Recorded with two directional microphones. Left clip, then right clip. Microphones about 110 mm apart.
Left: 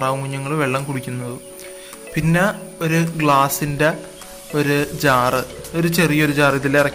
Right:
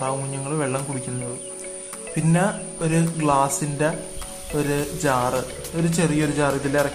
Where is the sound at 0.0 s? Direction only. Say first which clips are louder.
Left 5 dB; 15° left (ahead or behind).